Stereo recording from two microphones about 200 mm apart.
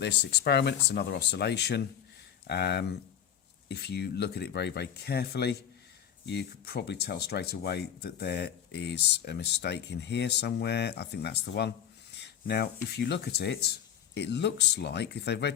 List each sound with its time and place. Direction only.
0.0 s speech: 55° left (ahead or behind)